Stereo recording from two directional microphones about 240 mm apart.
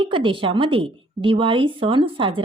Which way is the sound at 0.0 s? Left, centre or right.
Right.